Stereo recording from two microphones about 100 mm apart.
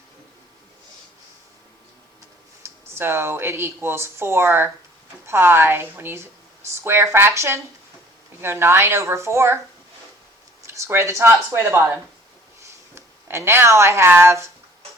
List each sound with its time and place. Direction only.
2.6 s speech: 25° right (ahead or behind)
10.7 s speech: 25° right (ahead or behind)